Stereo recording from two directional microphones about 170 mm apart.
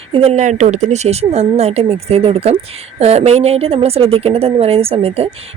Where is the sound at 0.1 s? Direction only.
40° right (ahead or behind).